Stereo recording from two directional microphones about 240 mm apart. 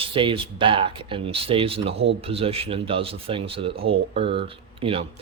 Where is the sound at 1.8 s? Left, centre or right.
Right.